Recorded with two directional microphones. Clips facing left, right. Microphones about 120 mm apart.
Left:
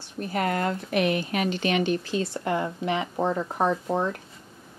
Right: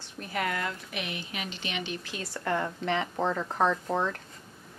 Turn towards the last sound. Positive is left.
turn(degrees=15)  # may be behind; listen again after turning